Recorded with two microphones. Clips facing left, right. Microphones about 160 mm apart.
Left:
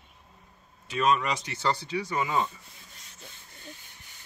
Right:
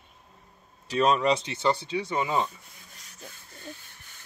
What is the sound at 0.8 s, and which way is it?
Speech, 35° right (ahead or behind).